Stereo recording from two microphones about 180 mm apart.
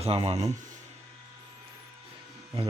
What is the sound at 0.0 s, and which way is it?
Speech, 35° right (ahead or behind).